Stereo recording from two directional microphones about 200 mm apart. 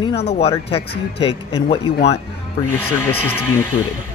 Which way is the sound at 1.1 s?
30° left (ahead or behind).